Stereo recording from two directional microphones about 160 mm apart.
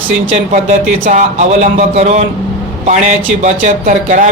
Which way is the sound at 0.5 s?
50° right (ahead or behind).